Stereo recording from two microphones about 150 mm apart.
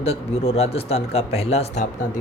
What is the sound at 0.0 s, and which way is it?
Speech, 45° left (ahead or behind).